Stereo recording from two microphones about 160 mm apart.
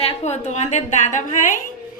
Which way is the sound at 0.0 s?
45° left (ahead or behind).